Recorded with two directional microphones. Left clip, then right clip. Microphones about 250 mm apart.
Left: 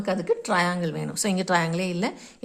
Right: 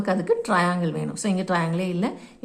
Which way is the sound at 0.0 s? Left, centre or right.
Centre.